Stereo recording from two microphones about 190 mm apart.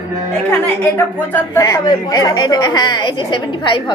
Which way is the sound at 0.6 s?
10° left (ahead or behind).